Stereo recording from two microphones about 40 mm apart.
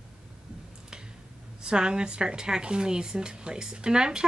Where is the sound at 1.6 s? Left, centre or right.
Centre.